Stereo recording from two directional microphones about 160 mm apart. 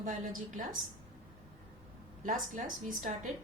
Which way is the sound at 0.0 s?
55° right (ahead or behind).